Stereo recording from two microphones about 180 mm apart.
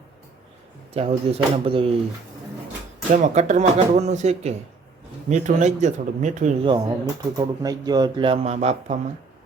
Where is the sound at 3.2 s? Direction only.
40° right (ahead or behind).